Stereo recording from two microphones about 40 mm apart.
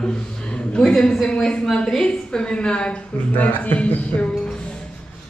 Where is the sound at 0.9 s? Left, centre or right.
Centre.